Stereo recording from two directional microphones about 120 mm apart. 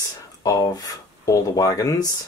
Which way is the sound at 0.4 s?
30° left (ahead or behind).